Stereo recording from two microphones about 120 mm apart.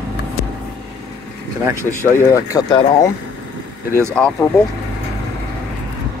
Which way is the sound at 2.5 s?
30° left (ahead or behind).